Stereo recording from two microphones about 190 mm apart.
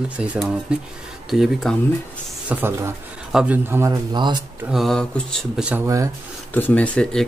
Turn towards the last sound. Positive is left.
turn(degrees=5)  # may be behind; listen again after turning